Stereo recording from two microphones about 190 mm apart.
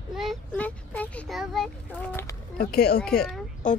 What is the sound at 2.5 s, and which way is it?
Speech, 55° left (ahead or behind).